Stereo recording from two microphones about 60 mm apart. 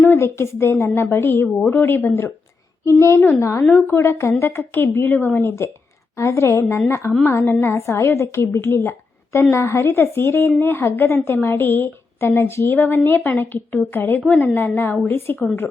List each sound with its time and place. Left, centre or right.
0.0 s a woman's voice: left
3.8 s a woman's voice: left
6.1 s a woman's voice: left
12.7 s a woman's voice: left